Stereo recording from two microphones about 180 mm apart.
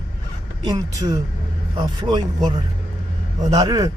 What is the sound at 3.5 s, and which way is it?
Speech, 20° right (ahead or behind).